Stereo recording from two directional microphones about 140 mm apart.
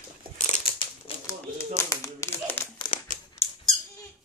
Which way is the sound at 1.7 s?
25° left (ahead or behind).